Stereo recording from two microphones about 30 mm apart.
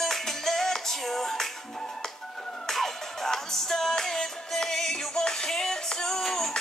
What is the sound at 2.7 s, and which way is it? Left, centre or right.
Music, centre.